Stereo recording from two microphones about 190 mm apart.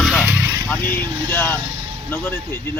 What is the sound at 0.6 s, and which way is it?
Speech, 5° left (ahead or behind).